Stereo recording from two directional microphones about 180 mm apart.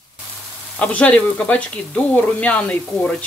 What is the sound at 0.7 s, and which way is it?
Speech, 10° left (ahead or behind).